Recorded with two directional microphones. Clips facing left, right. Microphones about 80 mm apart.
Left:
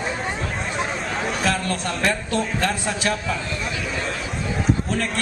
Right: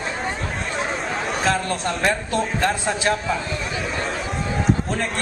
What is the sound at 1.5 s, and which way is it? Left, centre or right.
A man's voice, right.